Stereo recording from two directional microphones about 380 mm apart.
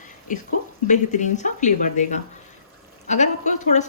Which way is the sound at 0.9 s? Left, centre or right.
Centre.